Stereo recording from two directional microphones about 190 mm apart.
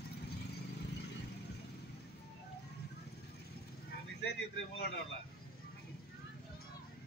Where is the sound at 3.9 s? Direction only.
60° left (ahead or behind).